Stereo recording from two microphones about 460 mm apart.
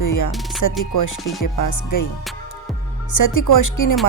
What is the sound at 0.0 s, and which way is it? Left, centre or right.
Music, left.